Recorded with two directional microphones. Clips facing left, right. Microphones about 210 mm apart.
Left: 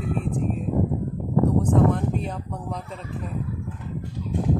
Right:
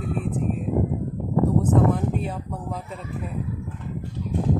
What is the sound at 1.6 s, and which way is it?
Speech, 5° right (ahead or behind).